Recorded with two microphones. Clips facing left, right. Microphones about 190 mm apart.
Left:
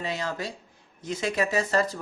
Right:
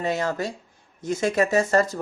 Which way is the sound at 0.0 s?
50° right (ahead or behind).